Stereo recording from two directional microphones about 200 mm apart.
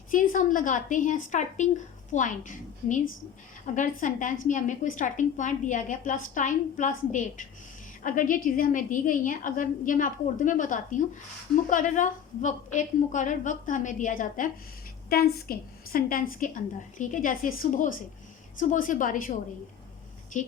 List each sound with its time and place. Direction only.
0.1 s a woman's voice: 40° left (ahead or behind)